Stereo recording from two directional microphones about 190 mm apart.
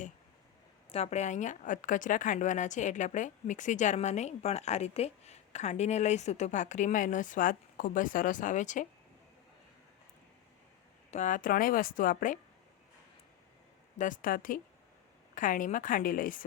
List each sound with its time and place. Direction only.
0.9 s a woman's voice: 35° left (ahead or behind)
11.1 s a woman's voice: 40° left (ahead or behind)
14.0 s a woman's voice: 45° left (ahead or behind)